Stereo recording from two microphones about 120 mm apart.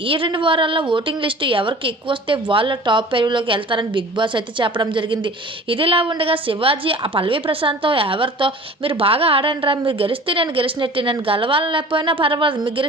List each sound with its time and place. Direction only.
0.1 s a woman's voice: 45° right (ahead or behind)